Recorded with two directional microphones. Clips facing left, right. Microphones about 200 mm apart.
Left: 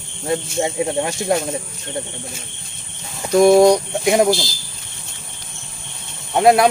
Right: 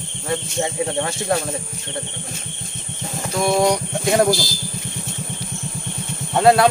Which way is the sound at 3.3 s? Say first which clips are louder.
Left 9 dB; 40° left (ahead or behind).